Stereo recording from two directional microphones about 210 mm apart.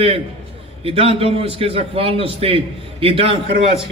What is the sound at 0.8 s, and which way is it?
A man's voice, 25° right (ahead or behind).